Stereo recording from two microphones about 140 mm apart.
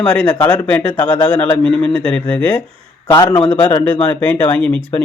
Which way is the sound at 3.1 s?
35° left (ahead or behind).